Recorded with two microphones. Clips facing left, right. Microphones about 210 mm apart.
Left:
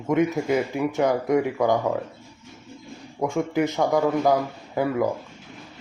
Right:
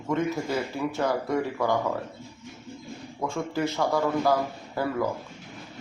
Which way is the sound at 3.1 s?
20° left (ahead or behind).